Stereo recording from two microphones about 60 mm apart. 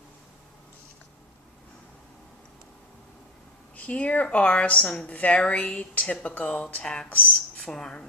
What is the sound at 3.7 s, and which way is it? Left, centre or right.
A woman's voice, left.